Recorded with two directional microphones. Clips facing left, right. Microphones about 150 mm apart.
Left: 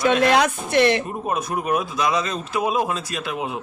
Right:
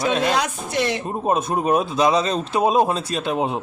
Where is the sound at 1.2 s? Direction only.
30° right (ahead or behind).